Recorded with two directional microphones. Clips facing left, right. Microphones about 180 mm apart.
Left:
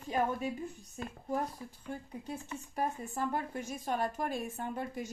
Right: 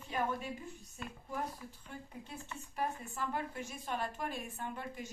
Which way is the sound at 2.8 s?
45° left (ahead or behind).